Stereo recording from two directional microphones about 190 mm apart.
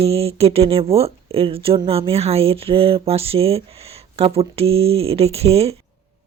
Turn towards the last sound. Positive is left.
turn(degrees=-30)  # may be behind; listen again after turning